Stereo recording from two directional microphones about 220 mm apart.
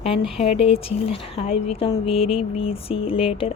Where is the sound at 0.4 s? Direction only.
25° left (ahead or behind).